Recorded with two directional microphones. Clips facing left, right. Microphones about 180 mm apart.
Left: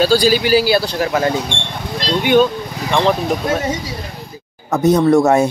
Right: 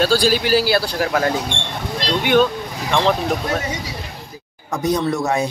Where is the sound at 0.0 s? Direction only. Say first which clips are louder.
Left 3 dB; centre (ahead or behind).